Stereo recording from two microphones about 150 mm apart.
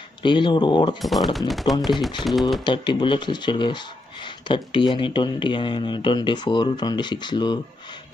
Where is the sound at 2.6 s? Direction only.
30° left (ahead or behind).